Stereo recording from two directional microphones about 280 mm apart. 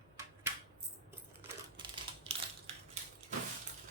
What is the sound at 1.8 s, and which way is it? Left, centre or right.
Typing, centre.